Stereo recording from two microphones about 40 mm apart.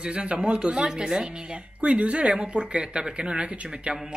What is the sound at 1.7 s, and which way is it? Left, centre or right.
Speech, right.